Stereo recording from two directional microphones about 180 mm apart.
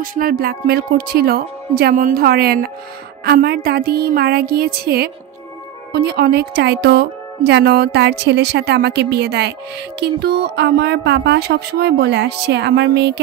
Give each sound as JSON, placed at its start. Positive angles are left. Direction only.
{"t": 0.0, "sound": "speech", "side_deg": -55}